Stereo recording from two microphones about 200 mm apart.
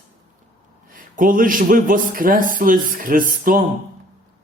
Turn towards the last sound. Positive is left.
turn(degrees=-45)  # may be behind; listen again after turning